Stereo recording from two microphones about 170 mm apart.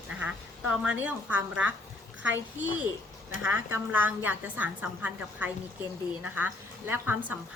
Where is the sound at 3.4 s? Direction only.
10° right (ahead or behind).